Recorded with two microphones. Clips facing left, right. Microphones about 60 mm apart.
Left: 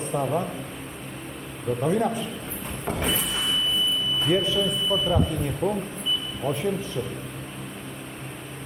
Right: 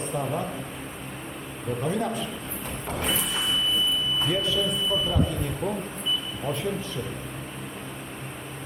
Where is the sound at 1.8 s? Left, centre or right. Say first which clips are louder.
Left 4 dB; centre.